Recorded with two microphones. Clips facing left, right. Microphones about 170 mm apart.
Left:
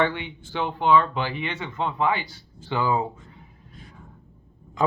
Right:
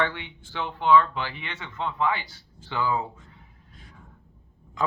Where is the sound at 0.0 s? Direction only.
15° left (ahead or behind).